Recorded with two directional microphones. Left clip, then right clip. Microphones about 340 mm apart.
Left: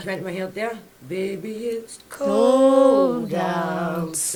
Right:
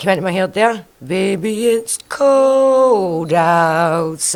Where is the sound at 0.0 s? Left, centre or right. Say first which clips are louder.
Right 12 dB; right.